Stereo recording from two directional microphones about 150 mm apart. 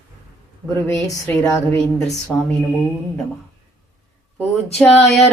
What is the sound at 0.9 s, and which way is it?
Speech, 15° left (ahead or behind).